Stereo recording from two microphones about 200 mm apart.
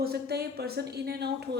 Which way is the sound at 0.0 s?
50° right (ahead or behind).